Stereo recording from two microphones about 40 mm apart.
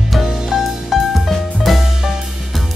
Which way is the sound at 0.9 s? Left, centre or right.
Centre.